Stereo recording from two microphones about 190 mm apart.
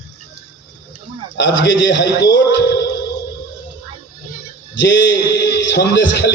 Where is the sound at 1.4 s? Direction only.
75° left (ahead or behind).